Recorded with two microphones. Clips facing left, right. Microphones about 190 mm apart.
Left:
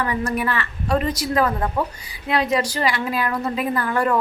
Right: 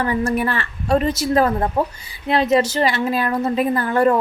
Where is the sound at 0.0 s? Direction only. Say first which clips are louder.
Right 3 dB; 30° right (ahead or behind).